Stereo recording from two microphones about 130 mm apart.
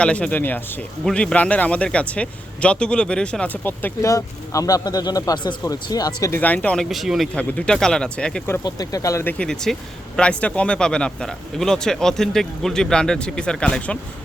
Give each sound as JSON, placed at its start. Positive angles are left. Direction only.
{"t": 0.0, "sound": "speech", "side_deg": 10}
{"t": 6.4, "sound": "speech", "side_deg": 10}
{"t": 6.9, "sound": "speech", "side_deg": 0}
{"t": 8.6, "sound": "speech", "side_deg": 30}
{"t": 9.4, "sound": "speech", "side_deg": 5}